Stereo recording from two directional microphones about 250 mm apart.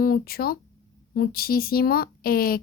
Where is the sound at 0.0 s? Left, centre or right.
Left.